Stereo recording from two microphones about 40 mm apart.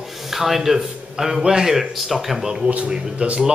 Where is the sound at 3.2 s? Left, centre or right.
Right.